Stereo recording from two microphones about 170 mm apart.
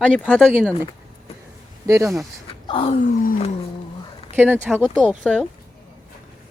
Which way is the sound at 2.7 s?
30° left (ahead or behind).